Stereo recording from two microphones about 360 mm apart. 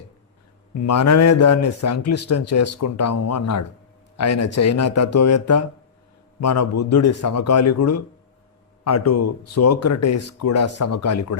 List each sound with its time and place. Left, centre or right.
0.7 s speech: left